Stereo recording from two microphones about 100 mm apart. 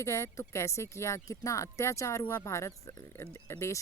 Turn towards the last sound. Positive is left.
turn(degrees=30)  # may be behind; listen again after turning